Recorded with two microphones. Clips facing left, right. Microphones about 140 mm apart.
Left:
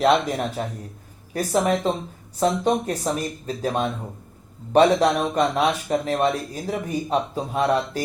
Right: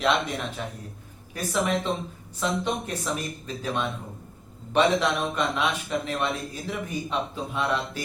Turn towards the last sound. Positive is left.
turn(degrees=40)  # may be behind; listen again after turning